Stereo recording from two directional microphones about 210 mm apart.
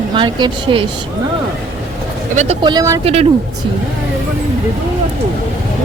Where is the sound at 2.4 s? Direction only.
25° right (ahead or behind).